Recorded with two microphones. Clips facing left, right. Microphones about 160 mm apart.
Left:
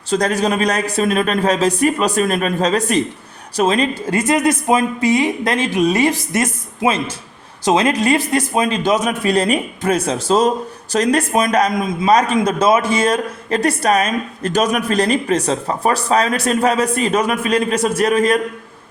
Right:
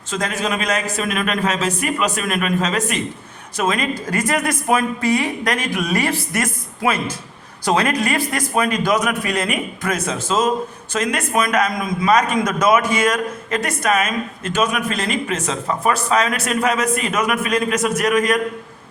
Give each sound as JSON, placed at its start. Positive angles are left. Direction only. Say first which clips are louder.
{"t": 0.1, "sound": "a man's voice", "louder": "left 6 dB", "side_deg": 40}